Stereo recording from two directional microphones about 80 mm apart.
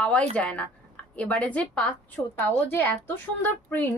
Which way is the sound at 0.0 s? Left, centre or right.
Centre.